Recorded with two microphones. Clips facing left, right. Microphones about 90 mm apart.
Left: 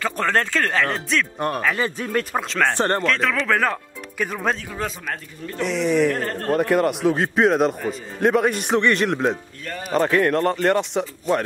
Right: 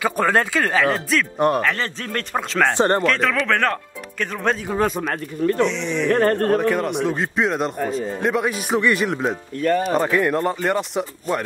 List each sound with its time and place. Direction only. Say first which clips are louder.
0.0 s speech: right 3 dB; 10° right (ahead or behind)
1.6 s speech: even; 10° left (ahead or behind)
2.6 s speech: right 3 dB; 15° right (ahead or behind)
3.0 s speech: right 2 dB; centre (ahead or behind)
4.7 s speech: right 7 dB; 50° right (ahead or behind)
5.7 s speech: left 4 dB; 5° left (ahead or behind)
6.1 s a man's voice: right 8 dB; 55° right (ahead or behind)
6.6 s speech: left 2 dB; centre (ahead or behind)
9.6 s speech: right 13 dB; 45° right (ahead or behind)
9.9 s speech: left 1 dB; 5° right (ahead or behind)